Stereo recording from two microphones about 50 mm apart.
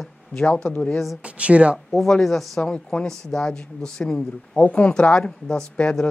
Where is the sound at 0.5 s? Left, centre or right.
Left.